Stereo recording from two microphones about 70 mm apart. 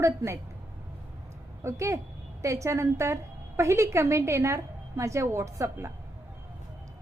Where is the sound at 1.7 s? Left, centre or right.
Right.